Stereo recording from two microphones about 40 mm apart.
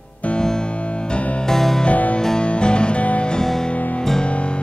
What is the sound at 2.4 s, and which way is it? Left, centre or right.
Music, left.